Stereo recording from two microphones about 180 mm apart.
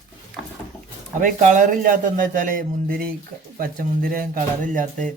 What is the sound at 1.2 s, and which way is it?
Speech, 45° right (ahead or behind).